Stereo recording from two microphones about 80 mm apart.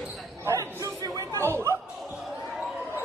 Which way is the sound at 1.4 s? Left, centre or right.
Right.